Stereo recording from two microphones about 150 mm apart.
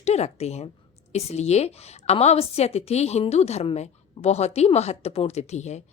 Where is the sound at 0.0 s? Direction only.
45° left (ahead or behind).